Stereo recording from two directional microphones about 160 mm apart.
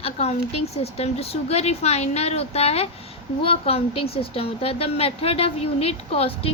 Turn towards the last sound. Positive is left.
turn(degrees=35)  # may be behind; listen again after turning